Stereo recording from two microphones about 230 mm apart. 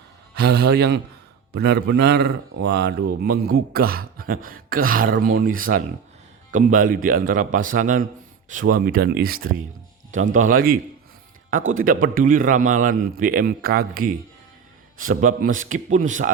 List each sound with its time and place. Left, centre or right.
0.3 s a man's voice: right